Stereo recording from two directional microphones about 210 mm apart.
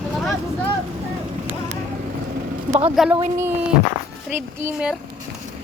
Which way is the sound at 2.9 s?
Centre (ahead or behind).